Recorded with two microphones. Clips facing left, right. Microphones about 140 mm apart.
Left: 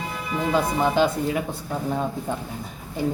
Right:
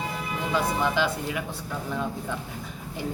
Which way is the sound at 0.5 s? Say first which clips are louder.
Left 4 dB; 40° left (ahead or behind).